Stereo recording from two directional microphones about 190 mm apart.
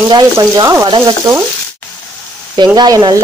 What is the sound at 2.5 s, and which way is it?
Frying, 25° right (ahead or behind).